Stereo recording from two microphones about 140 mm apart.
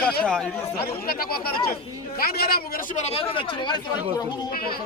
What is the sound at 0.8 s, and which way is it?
Speech, 90° left.